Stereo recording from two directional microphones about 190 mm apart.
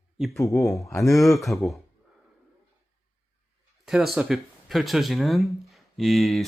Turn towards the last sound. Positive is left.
turn(degrees=0)  # may be behind; listen again after turning